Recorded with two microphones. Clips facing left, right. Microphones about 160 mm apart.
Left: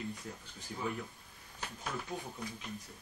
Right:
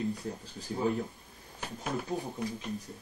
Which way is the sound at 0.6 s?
35° right (ahead or behind).